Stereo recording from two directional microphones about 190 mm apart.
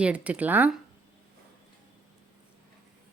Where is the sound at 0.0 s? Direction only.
5° right (ahead or behind).